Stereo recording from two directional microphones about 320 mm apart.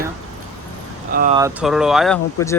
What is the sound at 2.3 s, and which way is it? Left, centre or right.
Speech, centre.